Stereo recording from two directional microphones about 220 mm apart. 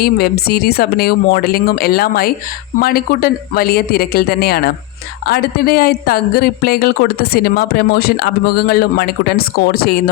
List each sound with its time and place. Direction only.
0.0 s speech: 45° left (ahead or behind)